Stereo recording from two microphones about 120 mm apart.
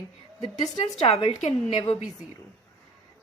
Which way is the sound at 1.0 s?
50° left (ahead or behind).